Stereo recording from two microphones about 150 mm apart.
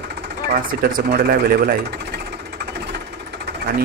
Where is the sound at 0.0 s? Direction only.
90° right.